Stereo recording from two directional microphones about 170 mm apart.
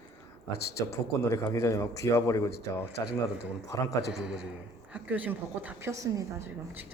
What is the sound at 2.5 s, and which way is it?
Speech, 70° left (ahead or behind).